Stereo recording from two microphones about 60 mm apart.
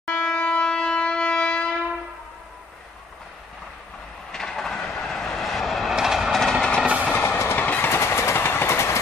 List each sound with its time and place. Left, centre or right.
0.1 s shofar: centre
4.3 s train: centre
6.4 s train: centre
7.2 s train: left
7.5 s vehicle: left
7.9 s vehicle: left